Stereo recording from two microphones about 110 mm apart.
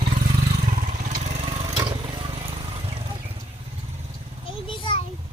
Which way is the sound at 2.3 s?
60° right (ahead or behind).